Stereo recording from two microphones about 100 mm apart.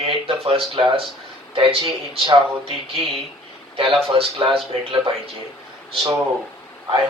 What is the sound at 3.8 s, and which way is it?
Speech, 70° right (ahead or behind).